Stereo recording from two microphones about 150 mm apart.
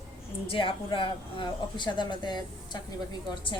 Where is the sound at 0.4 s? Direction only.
35° left (ahead or behind).